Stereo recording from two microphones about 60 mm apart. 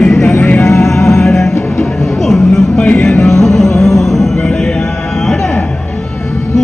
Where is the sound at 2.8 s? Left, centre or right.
Left.